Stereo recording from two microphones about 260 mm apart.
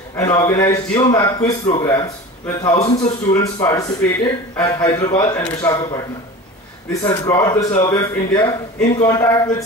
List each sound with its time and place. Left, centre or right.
0.2 s speech: centre
2.7 s speech: left
3.3 s speech: centre
6.9 s speech: centre